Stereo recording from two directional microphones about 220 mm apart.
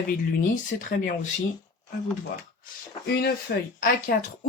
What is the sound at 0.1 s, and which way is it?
Speech, 40° left (ahead or behind).